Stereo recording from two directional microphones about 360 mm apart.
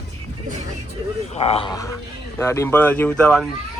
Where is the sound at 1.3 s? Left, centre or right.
Centre.